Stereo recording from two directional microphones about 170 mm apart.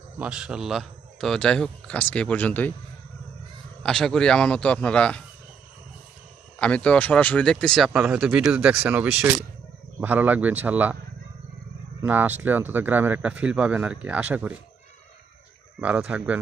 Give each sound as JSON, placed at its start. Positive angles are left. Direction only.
{"t": 0.2, "sound": "speech", "side_deg": -5}
{"t": 3.8, "sound": "speech", "side_deg": 5}
{"t": 6.6, "sound": "speech", "side_deg": 5}
{"t": 7.9, "sound": "speech", "side_deg": -5}
{"t": 12.0, "sound": "speech", "side_deg": -10}
{"t": 15.8, "sound": "speech", "side_deg": -10}